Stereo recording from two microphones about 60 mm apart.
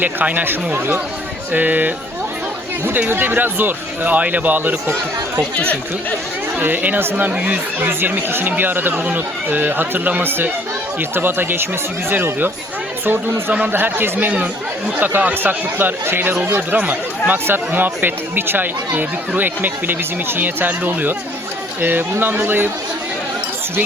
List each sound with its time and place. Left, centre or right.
0.0 s speech: right
6.6 s speech: right
13.7 s speech: right